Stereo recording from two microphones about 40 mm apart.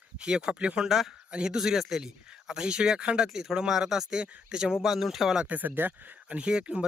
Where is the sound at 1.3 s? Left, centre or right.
Right.